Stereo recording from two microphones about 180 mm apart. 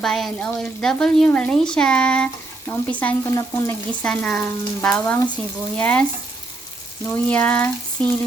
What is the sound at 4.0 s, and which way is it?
Frying, 5° left (ahead or behind).